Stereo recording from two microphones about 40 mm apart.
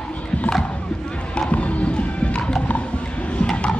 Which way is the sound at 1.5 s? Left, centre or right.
Left.